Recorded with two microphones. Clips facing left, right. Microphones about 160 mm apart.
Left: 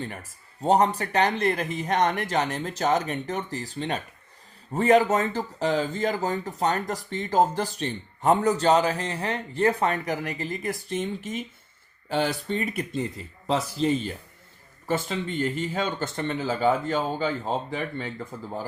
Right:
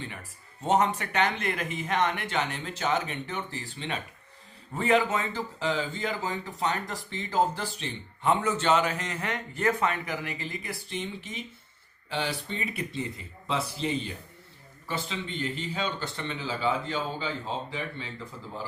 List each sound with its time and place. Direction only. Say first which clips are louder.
0.0 s speech: left 5 dB; 40° left (ahead or behind)
14.8 s speech: left 7 dB; 45° left (ahead or behind)